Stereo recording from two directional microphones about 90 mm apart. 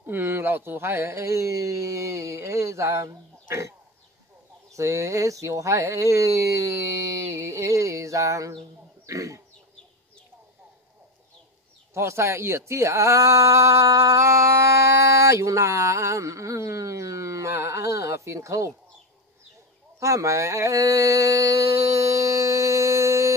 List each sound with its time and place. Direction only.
0.0 s speech: 25° right (ahead or behind)
4.7 s speech: 35° right (ahead or behind)
9.0 s a sound: 40° right (ahead or behind)
11.9 s speech: 30° right (ahead or behind)
20.0 s mantra: 35° right (ahead or behind)